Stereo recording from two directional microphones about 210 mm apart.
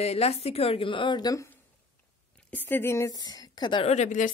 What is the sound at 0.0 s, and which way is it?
A woman's voice, 30° left (ahead or behind).